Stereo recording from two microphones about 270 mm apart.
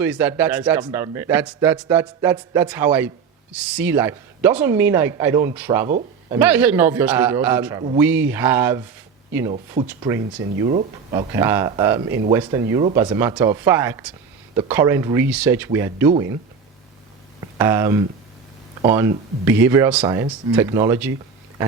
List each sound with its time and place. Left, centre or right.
0.0 s a man's voice: centre
9.5 s speech: right
11.3 s a man's voice: centre
13.0 s a man's voice: centre
17.6 s a man's voice: centre